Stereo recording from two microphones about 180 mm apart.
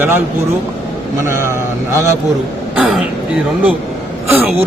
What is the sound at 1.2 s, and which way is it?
Speech, 15° right (ahead or behind).